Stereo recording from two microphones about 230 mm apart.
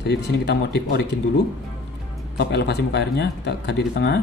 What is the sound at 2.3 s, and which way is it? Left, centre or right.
Speech, left.